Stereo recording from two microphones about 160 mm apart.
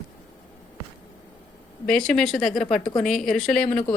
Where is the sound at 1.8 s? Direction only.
5° left (ahead or behind).